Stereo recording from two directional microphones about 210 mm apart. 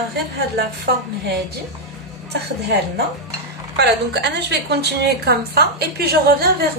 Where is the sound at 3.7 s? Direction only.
55° right (ahead or behind).